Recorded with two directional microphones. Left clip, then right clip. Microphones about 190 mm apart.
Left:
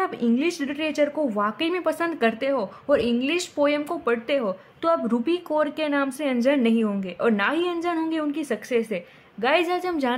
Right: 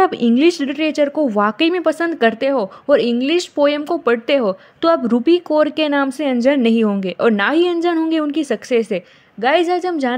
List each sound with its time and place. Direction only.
0.0 s a woman's voice: 35° right (ahead or behind)